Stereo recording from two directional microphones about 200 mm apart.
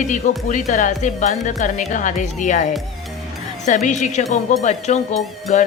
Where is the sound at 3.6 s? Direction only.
35° left (ahead or behind).